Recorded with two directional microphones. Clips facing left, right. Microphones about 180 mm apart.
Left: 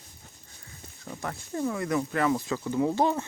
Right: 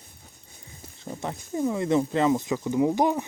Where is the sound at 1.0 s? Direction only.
25° right (ahead or behind).